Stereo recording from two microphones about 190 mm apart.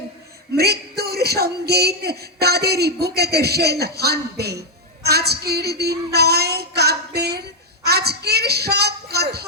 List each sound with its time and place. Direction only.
0.5 s a man's voice: 55° right (ahead or behind)